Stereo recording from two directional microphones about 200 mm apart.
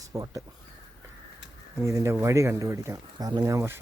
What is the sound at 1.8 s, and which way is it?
Speech, 15° right (ahead or behind).